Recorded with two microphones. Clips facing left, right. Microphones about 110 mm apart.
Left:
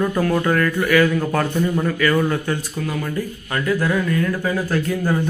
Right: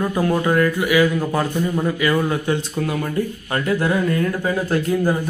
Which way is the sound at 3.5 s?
25° right (ahead or behind).